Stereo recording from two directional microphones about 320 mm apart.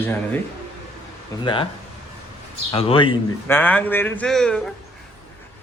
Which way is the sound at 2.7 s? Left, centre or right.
Centre.